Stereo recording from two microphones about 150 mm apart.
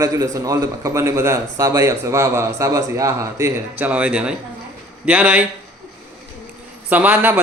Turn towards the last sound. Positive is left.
turn(degrees=-10)  # may be behind; listen again after turning